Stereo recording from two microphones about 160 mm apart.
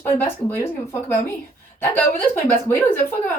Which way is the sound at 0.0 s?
15° left (ahead or behind).